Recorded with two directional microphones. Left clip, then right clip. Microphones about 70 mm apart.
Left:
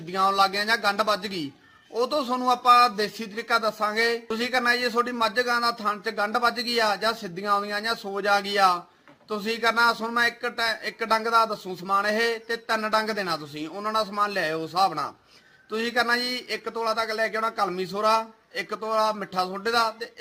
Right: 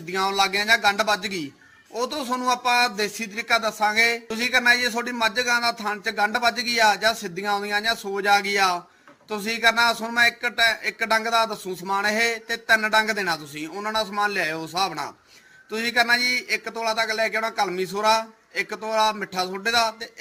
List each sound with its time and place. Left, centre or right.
0.1 s speech: left